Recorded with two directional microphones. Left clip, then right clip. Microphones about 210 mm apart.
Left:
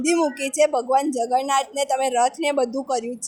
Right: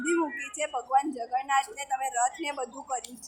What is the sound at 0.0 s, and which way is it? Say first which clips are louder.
Speech: left 8 dB; 55° left (ahead or behind).